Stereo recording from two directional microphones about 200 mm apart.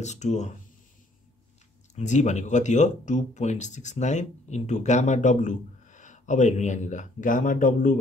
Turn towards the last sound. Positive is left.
turn(degrees=40)  # may be behind; listen again after turning